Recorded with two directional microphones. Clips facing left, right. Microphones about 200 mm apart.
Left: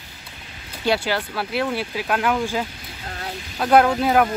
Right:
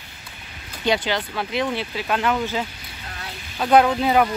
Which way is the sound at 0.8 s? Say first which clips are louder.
Even; 10° left (ahead or behind).